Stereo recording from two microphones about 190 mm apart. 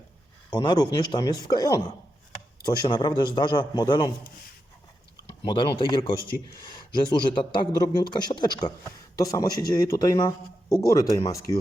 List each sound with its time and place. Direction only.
0.5 s speech: 20° left (ahead or behind)
5.3 s speech: 25° left (ahead or behind)